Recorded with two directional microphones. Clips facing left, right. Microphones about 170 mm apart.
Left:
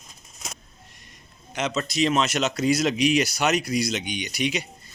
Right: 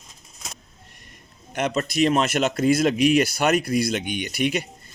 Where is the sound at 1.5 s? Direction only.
55° right (ahead or behind).